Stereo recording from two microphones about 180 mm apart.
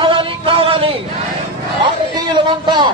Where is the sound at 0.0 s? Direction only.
30° right (ahead or behind).